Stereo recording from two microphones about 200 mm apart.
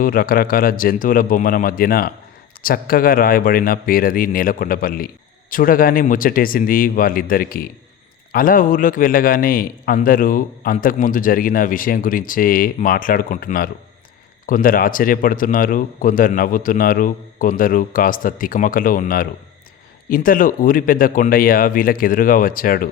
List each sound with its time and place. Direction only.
0.0 s a man's voice: 45° left (ahead or behind)